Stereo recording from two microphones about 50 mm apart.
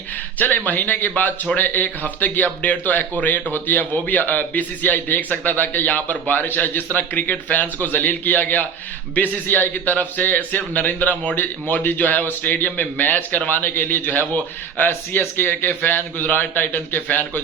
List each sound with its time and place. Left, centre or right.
0.3 s a man's voice: left
11.3 s a man's voice: left